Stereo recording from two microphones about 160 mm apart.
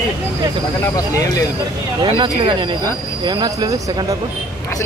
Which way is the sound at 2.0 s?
30° right (ahead or behind).